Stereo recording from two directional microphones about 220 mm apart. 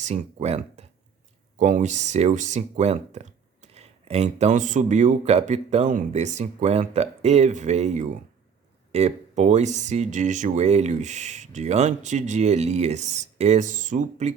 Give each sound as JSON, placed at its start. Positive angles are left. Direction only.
{"t": 0.0, "sound": "speech", "side_deg": -30}